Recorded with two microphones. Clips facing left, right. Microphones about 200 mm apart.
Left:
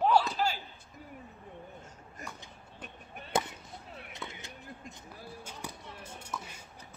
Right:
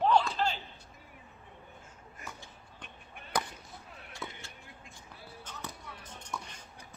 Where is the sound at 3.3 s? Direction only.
25° left (ahead or behind).